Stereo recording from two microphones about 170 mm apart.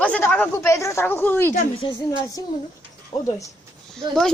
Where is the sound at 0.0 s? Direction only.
10° left (ahead or behind).